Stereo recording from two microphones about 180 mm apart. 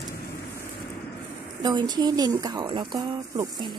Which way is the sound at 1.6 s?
25° right (ahead or behind).